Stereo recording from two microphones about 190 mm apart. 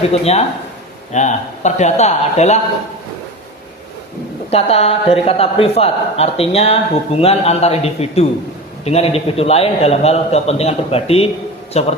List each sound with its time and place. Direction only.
0.1 s speech: 35° left (ahead or behind)
4.5 s speech: 30° left (ahead or behind)